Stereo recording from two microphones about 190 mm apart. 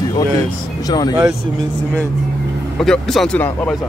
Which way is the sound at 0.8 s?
20° left (ahead or behind).